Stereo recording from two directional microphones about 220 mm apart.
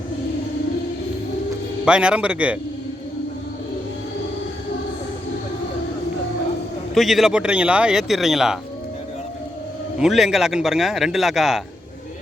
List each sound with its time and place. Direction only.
1.8 s a man's voice: 5° right (ahead or behind)
6.9 s a man's voice: centre (ahead or behind)
10.0 s a man's voice: centre (ahead or behind)